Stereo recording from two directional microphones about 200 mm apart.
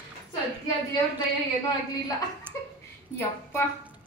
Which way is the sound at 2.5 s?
10° left (ahead or behind).